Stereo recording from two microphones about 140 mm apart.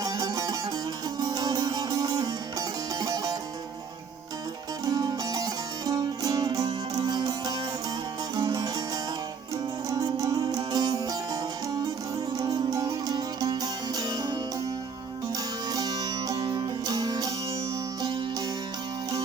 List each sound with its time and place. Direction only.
0.0 s music: 25° right (ahead or behind)
4.9 s music: 25° right (ahead or behind)
9.9 s music: 25° right (ahead or behind)
12.4 s music: 25° right (ahead or behind)
15.7 s music: 30° right (ahead or behind)